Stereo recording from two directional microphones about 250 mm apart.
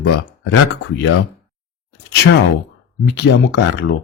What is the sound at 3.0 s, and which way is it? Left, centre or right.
Speech, left.